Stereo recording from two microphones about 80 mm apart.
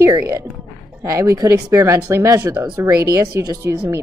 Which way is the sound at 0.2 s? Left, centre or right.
Right.